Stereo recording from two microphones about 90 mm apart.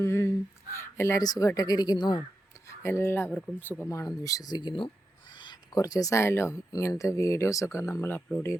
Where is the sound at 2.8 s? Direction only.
30° left (ahead or behind).